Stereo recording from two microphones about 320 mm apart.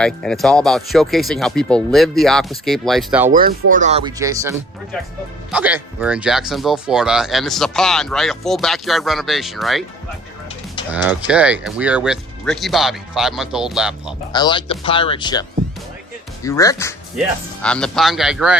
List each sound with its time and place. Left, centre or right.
0.0 s speech: centre
3.2 s speech: right; by 9.8 s centre
10.9 s speech: centre
14.3 s speech: centre